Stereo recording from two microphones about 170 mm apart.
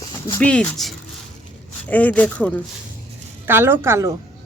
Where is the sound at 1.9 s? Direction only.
10° left (ahead or behind).